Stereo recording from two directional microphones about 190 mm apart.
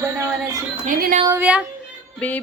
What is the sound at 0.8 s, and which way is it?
Speech, 45° right (ahead or behind).